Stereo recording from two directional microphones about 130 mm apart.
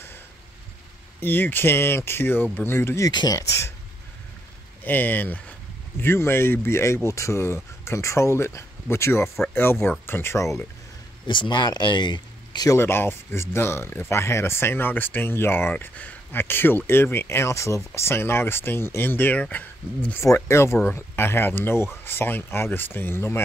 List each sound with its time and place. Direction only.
1.2 s speech: 15° left (ahead or behind)
3.1 s speech: 30° left (ahead or behind)
4.8 s speech: 15° left (ahead or behind)
11.2 s speech: 35° left (ahead or behind)
12.7 s speech: 20° left (ahead or behind)